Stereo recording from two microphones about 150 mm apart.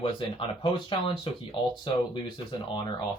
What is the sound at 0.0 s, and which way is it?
Speech, 35° left (ahead or behind).